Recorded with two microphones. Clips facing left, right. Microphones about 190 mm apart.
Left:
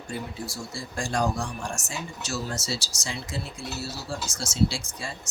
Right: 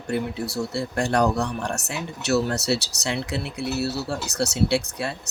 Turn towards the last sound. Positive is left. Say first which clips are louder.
# right 7 dB
turn(degrees=-65)  # may be behind; listen again after turning